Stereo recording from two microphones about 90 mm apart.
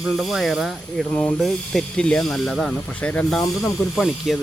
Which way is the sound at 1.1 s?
15° left (ahead or behind).